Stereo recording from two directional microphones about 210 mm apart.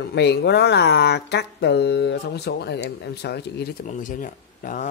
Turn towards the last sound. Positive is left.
turn(degrees=40)  # may be behind; listen again after turning